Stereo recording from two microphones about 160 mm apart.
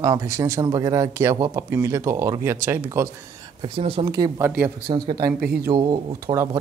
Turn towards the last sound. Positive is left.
turn(degrees=-25)  # may be behind; listen again after turning